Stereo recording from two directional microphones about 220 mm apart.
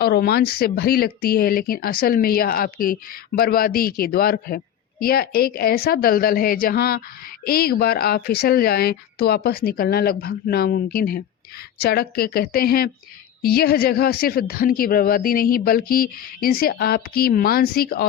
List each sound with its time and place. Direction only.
0.0 s speech: 45° left (ahead or behind)